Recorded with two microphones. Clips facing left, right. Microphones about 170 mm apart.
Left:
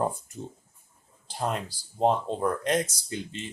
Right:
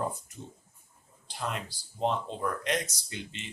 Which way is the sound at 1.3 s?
40° left (ahead or behind).